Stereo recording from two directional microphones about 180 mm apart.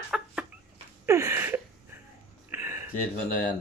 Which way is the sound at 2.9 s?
50° left (ahead or behind).